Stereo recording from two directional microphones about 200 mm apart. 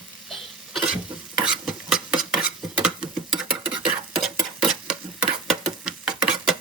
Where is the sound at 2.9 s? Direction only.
5° right (ahead or behind).